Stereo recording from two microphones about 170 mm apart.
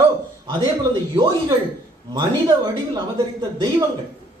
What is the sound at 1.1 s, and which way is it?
Speech, 25° right (ahead or behind).